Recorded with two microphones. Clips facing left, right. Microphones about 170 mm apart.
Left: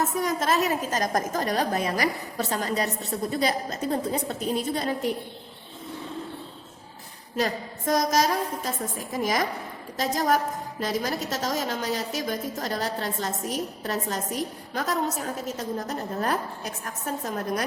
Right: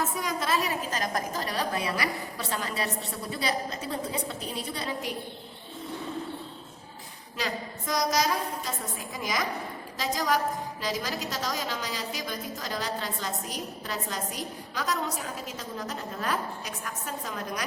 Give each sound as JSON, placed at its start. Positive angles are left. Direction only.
{"t": 0.2, "sound": "a woman's voice", "side_deg": 45}
{"t": 7.3, "sound": "a woman's voice", "side_deg": 45}